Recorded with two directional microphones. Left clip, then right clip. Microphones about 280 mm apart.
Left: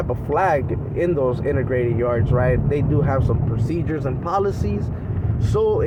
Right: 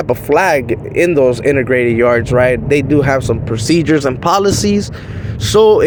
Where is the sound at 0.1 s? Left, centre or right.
Right.